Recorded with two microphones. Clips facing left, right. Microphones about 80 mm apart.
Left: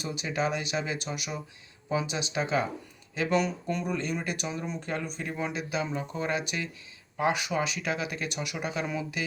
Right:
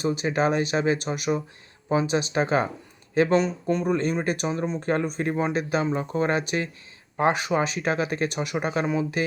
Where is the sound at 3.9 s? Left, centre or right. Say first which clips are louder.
Right 7 dB; right.